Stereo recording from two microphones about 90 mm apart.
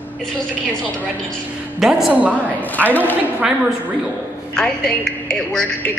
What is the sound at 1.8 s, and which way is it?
Speech, 5° right (ahead or behind).